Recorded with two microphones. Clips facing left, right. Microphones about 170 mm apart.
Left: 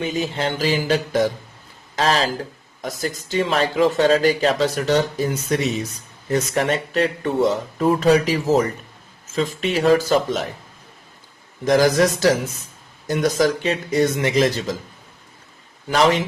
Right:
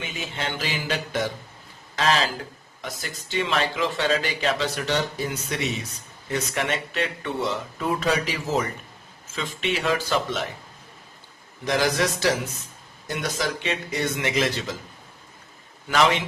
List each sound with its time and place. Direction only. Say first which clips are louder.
0.0 s speech: left 9 dB; 35° left (ahead or behind)
11.6 s a man's voice: left 7 dB; 40° left (ahead or behind)
15.9 s speech: left 4 dB; 35° left (ahead or behind)